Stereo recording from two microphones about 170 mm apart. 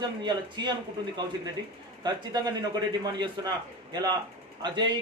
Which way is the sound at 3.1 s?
25° right (ahead or behind).